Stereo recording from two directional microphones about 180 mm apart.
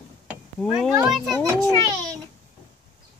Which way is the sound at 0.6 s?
Centre (ahead or behind).